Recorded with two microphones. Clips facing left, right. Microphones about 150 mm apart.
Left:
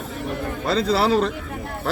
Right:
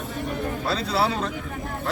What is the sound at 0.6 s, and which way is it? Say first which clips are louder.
Speech: left 5 dB; 90° left.